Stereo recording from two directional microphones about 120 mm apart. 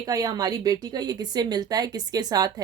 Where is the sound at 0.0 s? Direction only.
30° right (ahead or behind).